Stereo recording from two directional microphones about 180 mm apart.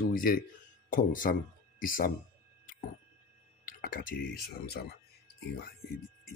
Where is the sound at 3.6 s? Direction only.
50° left (ahead or behind).